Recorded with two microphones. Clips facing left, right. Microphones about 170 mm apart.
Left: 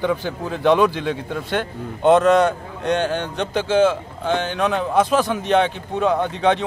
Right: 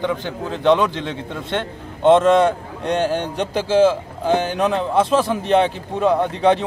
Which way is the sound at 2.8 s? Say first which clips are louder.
Right 1 dB; 35° right (ahead or behind).